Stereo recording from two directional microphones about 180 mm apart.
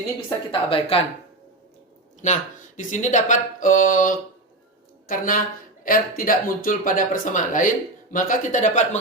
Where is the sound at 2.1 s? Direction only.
40° left (ahead or behind).